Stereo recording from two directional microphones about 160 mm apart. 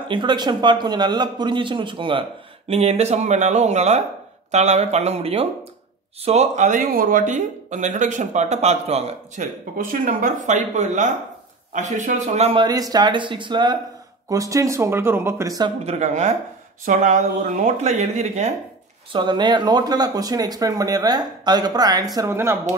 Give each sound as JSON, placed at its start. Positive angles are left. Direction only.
{"t": 0.1, "sound": "speech", "side_deg": -30}
{"t": 2.7, "sound": "speech", "side_deg": -40}
{"t": 12.5, "sound": "speech", "side_deg": -25}
{"t": 15.8, "sound": "speech", "side_deg": -45}
{"t": 19.1, "sound": "speech", "side_deg": -30}